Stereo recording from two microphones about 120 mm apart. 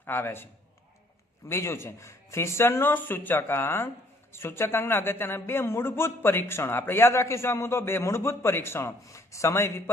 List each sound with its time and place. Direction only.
0.0 s a man's voice: 20° left (ahead or behind)
1.5 s a man's voice: 20° left (ahead or behind)